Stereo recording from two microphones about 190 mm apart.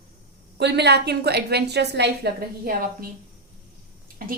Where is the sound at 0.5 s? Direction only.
60° right (ahead or behind).